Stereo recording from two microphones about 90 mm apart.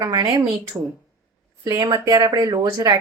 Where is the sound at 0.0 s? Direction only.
40° right (ahead or behind).